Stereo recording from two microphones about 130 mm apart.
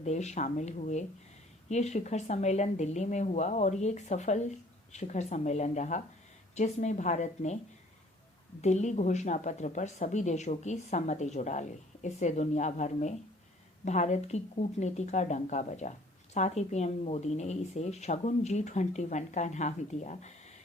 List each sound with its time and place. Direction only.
0.0 s speech: 60° left (ahead or behind)
8.6 s speech: 65° left (ahead or behind)